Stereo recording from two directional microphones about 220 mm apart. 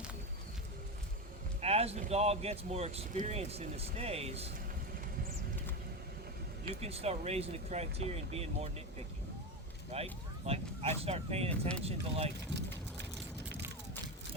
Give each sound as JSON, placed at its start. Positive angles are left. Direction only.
{"t": 1.6, "sound": "speech", "side_deg": -30}
{"t": 6.8, "sound": "speech", "side_deg": -30}